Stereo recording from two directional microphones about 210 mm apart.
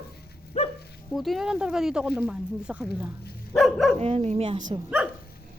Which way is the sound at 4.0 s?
30° right (ahead or behind).